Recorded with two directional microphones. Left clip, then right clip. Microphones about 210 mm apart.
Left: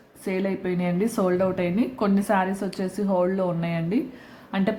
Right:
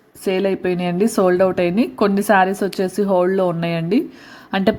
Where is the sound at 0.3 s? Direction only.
35° right (ahead or behind).